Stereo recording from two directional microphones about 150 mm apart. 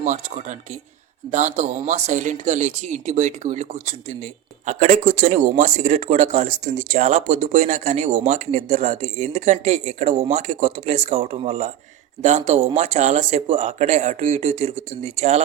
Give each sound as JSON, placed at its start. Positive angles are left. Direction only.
{"t": 0.0, "sound": "speech", "side_deg": -55}